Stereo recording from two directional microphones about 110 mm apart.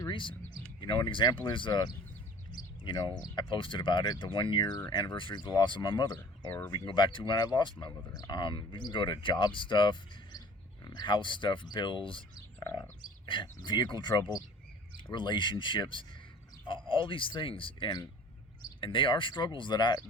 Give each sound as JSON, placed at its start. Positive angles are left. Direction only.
{"t": 0.1, "sound": "a sound", "side_deg": 50}
{"t": 0.8, "sound": "speech", "side_deg": 45}
{"t": 3.0, "sound": "speech", "side_deg": 45}
{"t": 13.2, "sound": "speech", "side_deg": 45}